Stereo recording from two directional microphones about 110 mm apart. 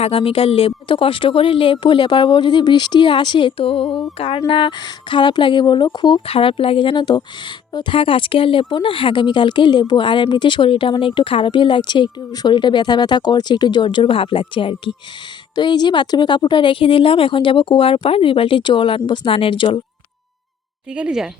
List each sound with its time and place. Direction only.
0.0 s speech: 60° left (ahead or behind); by 6.2 s 45° left (ahead or behind)
6.2 s speech: 55° left (ahead or behind)
15.5 s speech: 40° left (ahead or behind)
20.9 s speech: 10° right (ahead or behind)